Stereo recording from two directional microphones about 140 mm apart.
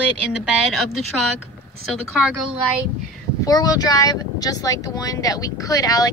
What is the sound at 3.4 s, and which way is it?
Speech, 25° left (ahead or behind).